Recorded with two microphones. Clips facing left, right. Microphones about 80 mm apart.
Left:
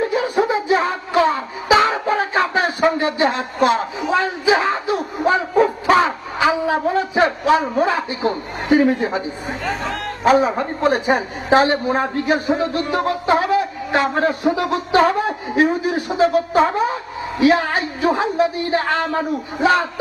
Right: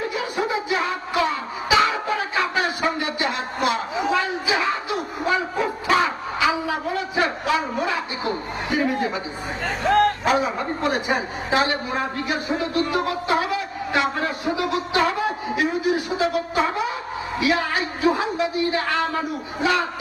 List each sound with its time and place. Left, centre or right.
0.1 s music: left
4.1 s dog: left
8.7 s a woman's voice: left
10.2 s a woman's voice: left